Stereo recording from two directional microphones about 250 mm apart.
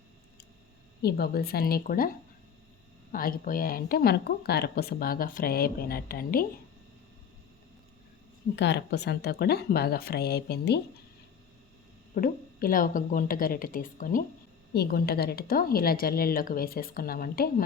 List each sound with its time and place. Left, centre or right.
1.0 s speech: left
3.1 s speech: left
8.5 s speech: left
12.1 s speech: left